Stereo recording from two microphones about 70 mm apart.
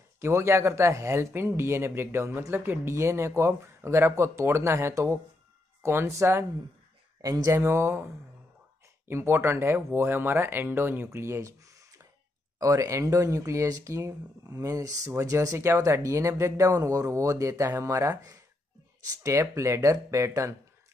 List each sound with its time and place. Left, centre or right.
0.2 s speech: right
7.2 s speech: right
7.5 s speech: right
12.5 s speech: right